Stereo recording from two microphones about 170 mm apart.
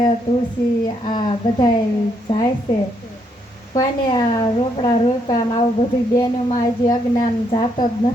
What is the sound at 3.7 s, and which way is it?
A woman's voice, 25° left (ahead or behind).